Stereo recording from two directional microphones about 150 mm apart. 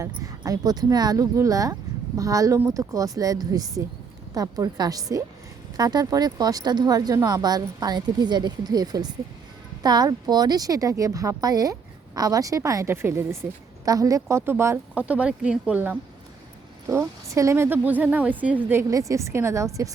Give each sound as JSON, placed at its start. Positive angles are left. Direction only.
{"t": 0.0, "sound": "speech", "side_deg": -25}